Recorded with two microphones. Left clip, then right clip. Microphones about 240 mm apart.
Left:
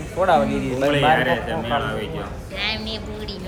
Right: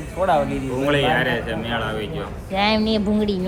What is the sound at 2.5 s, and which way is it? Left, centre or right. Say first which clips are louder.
Speech: right 7 dB; centre.